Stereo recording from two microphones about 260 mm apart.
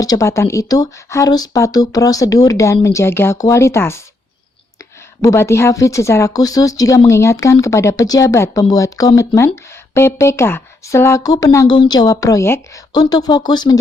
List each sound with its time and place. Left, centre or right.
0.0 s speech: centre